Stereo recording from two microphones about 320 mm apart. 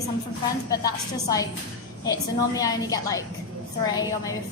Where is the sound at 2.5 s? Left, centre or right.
Centre.